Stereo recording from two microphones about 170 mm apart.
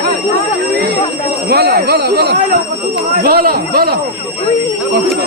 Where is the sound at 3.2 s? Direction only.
60° right (ahead or behind).